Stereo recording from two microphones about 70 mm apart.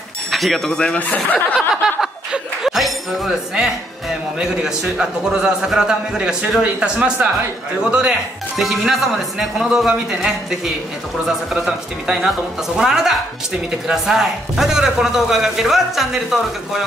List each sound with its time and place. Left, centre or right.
0.3 s speech: centre
0.9 s speech: left
1.8 s chuckle: centre
3.3 s a man's voice: centre